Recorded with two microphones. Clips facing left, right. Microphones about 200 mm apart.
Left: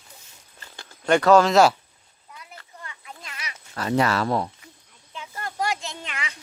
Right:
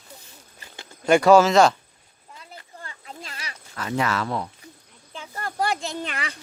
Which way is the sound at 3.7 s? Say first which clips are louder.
Left 3 dB; 35° left (ahead or behind).